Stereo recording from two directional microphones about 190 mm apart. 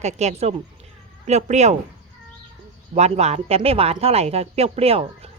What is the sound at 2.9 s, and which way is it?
Speech, 35° right (ahead or behind).